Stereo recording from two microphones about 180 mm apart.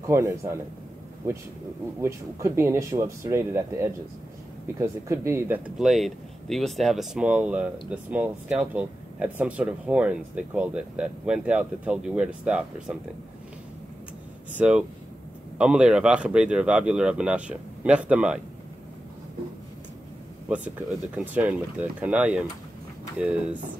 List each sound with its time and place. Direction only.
0.0 s speech: 15° right (ahead or behind)
2.0 s speech: 15° right (ahead or behind)
5.8 s speech: centre (ahead or behind)
14.6 s speech: 5° right (ahead or behind)
20.4 s speech: 10° right (ahead or behind)